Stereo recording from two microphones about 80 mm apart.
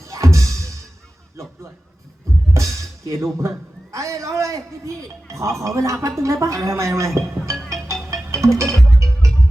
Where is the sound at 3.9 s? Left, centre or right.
Right.